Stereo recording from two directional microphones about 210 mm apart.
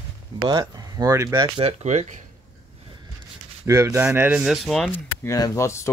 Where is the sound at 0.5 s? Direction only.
20° right (ahead or behind).